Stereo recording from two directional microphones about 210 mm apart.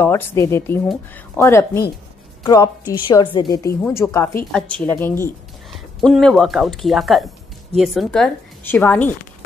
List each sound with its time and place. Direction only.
0.0 s a woman's voice: 10° left (ahead or behind)